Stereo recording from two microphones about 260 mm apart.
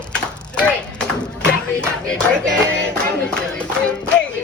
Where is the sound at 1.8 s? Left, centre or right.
Centre.